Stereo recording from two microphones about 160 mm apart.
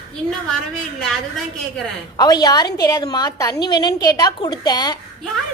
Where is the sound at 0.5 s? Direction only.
5° left (ahead or behind).